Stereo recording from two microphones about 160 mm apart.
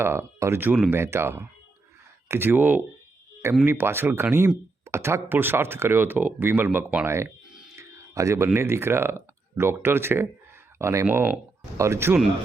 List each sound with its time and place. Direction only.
0.0 s speech: 15° right (ahead or behind)
7.8 s a sound: 20° right (ahead or behind)
8.5 s speech: 15° right (ahead or behind)